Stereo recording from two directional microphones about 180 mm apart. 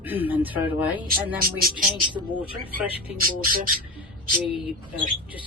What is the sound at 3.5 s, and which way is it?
Speech, 50° right (ahead or behind).